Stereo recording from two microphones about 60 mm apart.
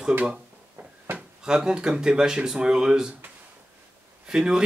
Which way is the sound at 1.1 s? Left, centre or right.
Centre.